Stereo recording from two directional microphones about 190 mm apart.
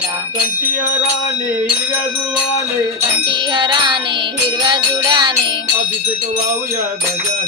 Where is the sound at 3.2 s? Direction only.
25° right (ahead or behind).